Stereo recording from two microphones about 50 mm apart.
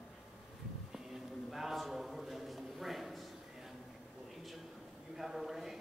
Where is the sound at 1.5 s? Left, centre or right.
Centre.